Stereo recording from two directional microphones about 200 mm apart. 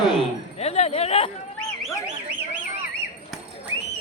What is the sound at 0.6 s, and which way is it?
Speech, 30° left (ahead or behind).